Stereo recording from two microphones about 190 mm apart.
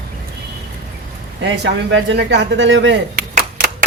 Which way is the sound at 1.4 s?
70° right (ahead or behind).